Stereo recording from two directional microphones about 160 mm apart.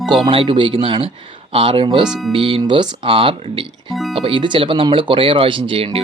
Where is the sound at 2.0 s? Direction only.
Centre (ahead or behind).